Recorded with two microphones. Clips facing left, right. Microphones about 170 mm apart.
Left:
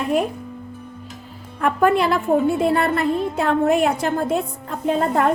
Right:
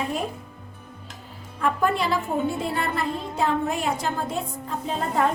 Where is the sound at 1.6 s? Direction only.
60° left (ahead or behind).